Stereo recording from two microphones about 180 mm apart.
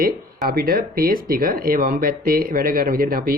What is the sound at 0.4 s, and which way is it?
Speech, 55° right (ahead or behind).